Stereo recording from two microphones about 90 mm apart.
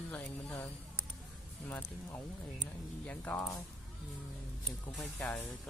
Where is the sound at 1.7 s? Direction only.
20° left (ahead or behind).